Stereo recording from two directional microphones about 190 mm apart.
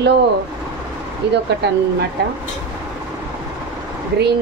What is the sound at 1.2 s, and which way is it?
Speech, 65° right (ahead or behind).